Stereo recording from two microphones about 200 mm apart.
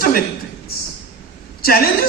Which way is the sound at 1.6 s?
50° left (ahead or behind).